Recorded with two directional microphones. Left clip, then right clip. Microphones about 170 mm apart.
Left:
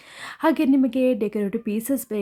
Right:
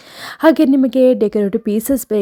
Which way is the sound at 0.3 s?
35° right (ahead or behind).